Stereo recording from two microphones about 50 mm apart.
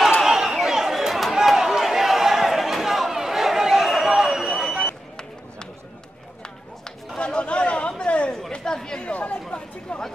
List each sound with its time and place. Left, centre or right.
0.2 s a sound: centre
7.2 s chatter: centre
9.0 s chatter: left
9.5 s chatter: centre